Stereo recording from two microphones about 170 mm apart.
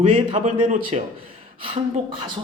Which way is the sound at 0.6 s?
45° right (ahead or behind).